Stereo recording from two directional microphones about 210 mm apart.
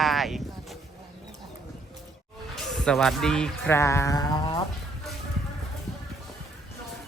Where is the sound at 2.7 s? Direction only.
Centre (ahead or behind); by 4.6 s 20° left (ahead or behind).